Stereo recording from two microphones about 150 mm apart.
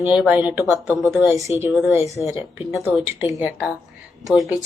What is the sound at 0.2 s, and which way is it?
Speech, 10° right (ahead or behind).